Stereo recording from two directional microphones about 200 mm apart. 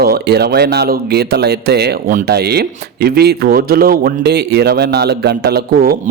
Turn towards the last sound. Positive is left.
turn(degrees=-50)  # may be behind; listen again after turning